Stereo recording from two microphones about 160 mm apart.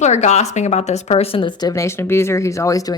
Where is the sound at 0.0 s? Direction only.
45° left (ahead or behind).